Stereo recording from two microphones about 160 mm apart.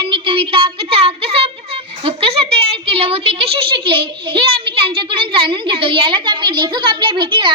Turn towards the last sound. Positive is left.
turn(degrees=-30)  # may be behind; listen again after turning